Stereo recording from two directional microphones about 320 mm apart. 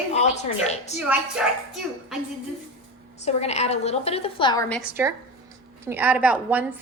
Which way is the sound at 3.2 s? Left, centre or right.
Centre.